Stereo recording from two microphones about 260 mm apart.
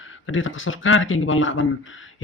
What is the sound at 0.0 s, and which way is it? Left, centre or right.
Speech, left.